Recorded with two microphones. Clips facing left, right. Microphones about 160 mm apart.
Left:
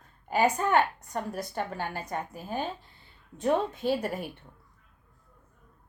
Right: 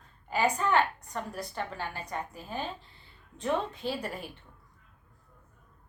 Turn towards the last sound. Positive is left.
turn(degrees=50)  # may be behind; listen again after turning